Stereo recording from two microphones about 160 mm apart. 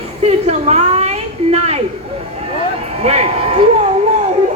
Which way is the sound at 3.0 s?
40° right (ahead or behind).